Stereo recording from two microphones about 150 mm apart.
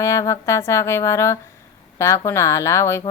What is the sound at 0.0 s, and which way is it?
Speech, 20° left (ahead or behind).